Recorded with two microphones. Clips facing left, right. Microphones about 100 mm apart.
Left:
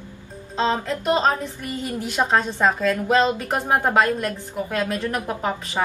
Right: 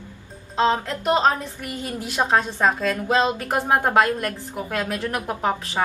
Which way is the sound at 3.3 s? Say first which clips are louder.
Right 1 dB; 5° right (ahead or behind).